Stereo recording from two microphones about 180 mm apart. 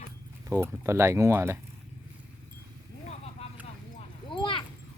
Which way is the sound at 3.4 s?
35° left (ahead or behind).